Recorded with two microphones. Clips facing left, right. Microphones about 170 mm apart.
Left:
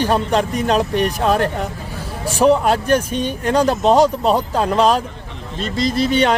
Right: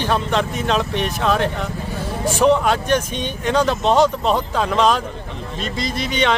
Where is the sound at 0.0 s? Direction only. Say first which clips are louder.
Left 3 dB; 40° left (ahead or behind).